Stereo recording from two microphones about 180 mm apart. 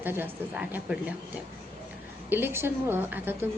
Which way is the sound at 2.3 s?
10° right (ahead or behind).